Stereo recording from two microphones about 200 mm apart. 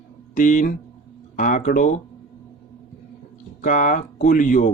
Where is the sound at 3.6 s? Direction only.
40° left (ahead or behind).